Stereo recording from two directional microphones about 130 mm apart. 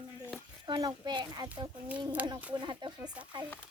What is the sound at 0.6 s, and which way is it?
A child's voice, 35° right (ahead or behind).